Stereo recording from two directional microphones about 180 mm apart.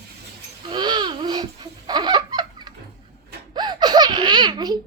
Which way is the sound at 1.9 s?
25° right (ahead or behind).